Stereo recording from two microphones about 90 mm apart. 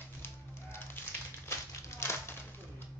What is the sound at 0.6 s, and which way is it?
Fire, 25° left (ahead or behind).